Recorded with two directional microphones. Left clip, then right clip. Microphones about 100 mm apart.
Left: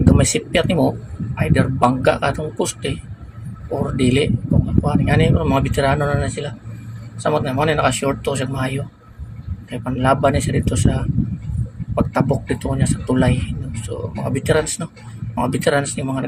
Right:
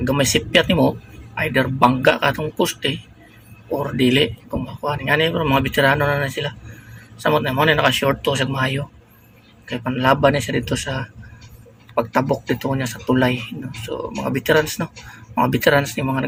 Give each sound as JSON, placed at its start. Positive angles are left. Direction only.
{"t": 0.1, "sound": "speech", "side_deg": -5}
{"t": 7.9, "sound": "speech", "side_deg": -15}